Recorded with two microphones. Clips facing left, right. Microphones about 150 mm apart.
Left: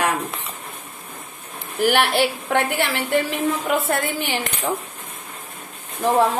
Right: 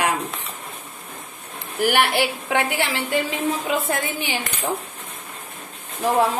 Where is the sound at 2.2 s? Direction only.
55° left (ahead or behind).